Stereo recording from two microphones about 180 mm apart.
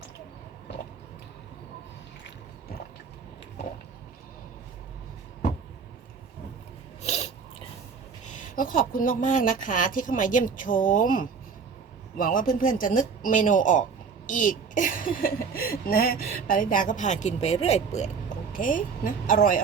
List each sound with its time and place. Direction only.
7.0 s a sound: 35° left (ahead or behind)
8.2 s a woman's voice: 45° left (ahead or behind)
18.5 s speech: 50° left (ahead or behind)